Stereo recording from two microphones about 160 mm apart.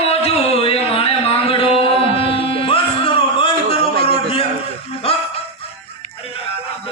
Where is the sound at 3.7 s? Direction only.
80° right.